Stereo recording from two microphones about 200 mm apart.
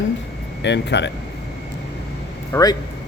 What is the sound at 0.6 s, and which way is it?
Speech, 60° left (ahead or behind).